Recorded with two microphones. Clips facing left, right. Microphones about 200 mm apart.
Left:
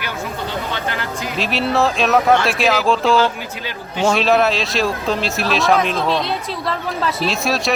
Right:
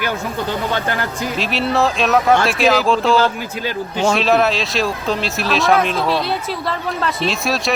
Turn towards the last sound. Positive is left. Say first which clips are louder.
# even
turn(degrees=0)  # may be behind; listen again after turning